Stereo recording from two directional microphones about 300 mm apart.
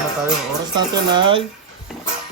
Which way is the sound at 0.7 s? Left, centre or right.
Centre.